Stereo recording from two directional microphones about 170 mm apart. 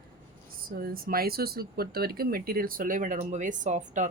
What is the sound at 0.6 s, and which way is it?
Speech, 60° right (ahead or behind).